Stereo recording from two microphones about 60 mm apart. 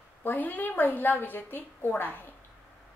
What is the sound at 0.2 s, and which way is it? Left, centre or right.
A woman's voice, left.